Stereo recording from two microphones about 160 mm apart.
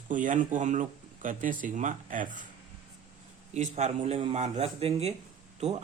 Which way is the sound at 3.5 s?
45° right (ahead or behind).